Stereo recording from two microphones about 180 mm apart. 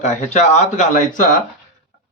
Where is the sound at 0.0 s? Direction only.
40° left (ahead or behind).